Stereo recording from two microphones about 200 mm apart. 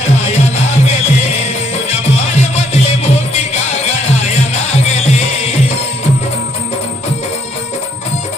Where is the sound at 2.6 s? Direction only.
35° left (ahead or behind).